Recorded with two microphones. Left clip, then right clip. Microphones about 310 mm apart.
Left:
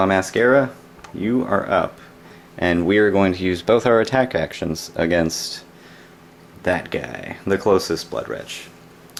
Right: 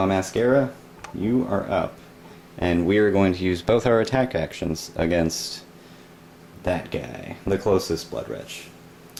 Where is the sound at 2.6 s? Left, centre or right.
Centre.